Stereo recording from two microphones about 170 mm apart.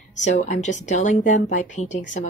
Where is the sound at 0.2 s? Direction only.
45° left (ahead or behind).